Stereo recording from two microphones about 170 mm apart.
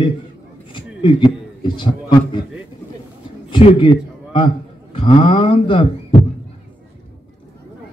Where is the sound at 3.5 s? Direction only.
30° left (ahead or behind).